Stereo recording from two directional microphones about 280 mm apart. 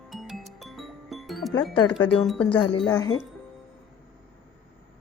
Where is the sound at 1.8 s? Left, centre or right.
Centre.